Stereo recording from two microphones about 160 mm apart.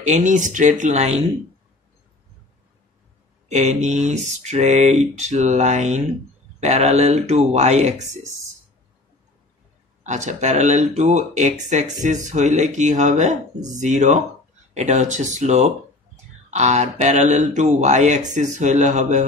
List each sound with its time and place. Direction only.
0.0 s speech: 50° right (ahead or behind)
3.4 s speech: 45° right (ahead or behind)
10.0 s speech: 45° right (ahead or behind)